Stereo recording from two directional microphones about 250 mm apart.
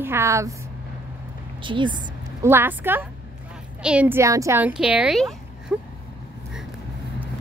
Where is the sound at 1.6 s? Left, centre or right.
Centre.